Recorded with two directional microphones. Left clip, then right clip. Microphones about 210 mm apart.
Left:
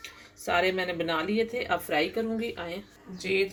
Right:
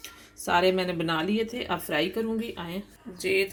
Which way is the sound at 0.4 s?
35° right (ahead or behind).